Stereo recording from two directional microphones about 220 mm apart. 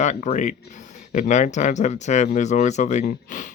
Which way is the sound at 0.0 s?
30° left (ahead or behind).